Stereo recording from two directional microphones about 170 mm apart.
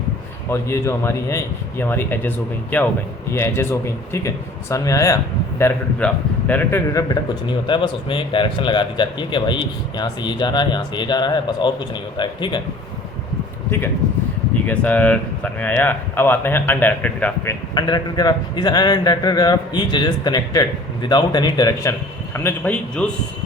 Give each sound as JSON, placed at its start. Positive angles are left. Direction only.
{"t": 0.5, "sound": "a man's voice", "side_deg": 15}
{"t": 14.7, "sound": "speech", "side_deg": 10}
{"t": 17.7, "sound": "a man's voice", "side_deg": 25}
{"t": 22.4, "sound": "speech", "side_deg": 10}